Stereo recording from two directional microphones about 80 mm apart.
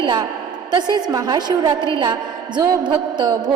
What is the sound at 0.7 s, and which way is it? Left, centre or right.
A woman's voice, right.